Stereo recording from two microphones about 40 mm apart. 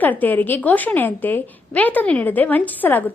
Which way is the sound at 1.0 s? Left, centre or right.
Left.